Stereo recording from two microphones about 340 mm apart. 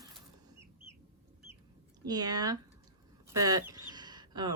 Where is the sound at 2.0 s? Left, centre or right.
Centre.